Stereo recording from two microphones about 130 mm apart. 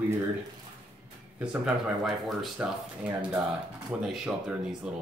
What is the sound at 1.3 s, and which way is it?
A woman's voice, 5° right (ahead or behind).